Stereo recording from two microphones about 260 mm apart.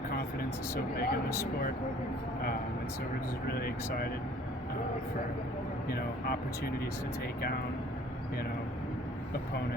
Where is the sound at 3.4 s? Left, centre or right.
Left.